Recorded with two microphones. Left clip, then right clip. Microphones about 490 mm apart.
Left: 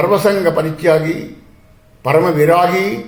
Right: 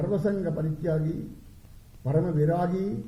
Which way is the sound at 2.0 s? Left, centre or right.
Left.